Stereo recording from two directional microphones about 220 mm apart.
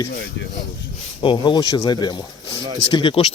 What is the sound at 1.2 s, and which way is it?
Speech, 20° left (ahead or behind).